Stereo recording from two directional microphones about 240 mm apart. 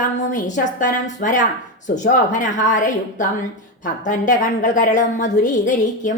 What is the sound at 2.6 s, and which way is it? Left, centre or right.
A woman's voice, left.